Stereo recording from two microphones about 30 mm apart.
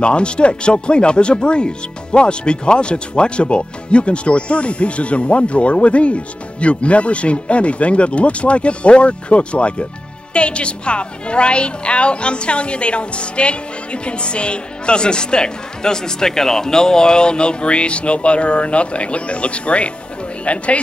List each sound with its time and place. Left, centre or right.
0.0 s speech: left